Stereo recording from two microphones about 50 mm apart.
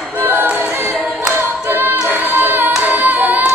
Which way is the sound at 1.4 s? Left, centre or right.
Right.